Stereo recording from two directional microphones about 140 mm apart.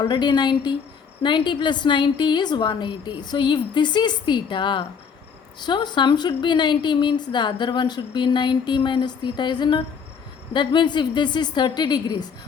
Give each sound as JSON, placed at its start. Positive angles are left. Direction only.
{"t": 0.1, "sound": "a woman's voice", "side_deg": 30}